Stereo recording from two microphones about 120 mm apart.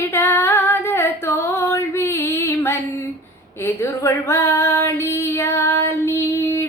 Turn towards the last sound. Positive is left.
turn(degrees=25)  # may be behind; listen again after turning